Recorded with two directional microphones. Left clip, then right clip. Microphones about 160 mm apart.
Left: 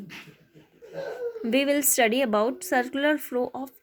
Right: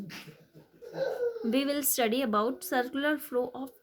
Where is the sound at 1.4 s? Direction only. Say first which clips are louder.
Left 12 dB; 20° left (ahead or behind).